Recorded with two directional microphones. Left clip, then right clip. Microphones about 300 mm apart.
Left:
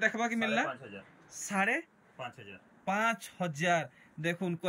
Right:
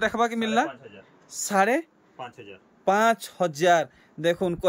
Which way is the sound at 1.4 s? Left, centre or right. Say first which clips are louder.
Right 9 dB; right.